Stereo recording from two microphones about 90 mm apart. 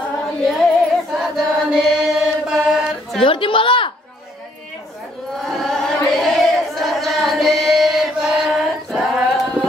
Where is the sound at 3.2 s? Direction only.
75° left (ahead or behind).